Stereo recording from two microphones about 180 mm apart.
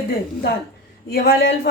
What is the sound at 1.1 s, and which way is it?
Speech, 60° left (ahead or behind).